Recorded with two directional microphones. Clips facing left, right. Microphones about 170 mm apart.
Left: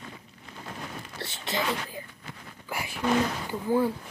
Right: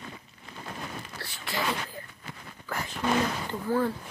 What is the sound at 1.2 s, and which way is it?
Speech, 20° left (ahead or behind).